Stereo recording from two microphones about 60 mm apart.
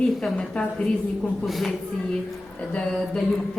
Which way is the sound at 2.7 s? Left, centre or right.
Centre.